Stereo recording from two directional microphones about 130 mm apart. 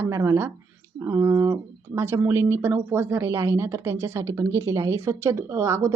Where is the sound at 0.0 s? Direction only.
25° right (ahead or behind).